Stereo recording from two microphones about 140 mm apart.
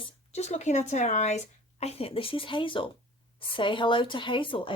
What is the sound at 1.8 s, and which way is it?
Speech, 45° left (ahead or behind).